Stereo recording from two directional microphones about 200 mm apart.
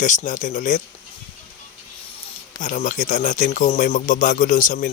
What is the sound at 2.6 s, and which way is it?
Speech, 40° left (ahead or behind).